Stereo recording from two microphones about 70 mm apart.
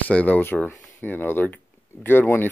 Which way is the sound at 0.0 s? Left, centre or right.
Left.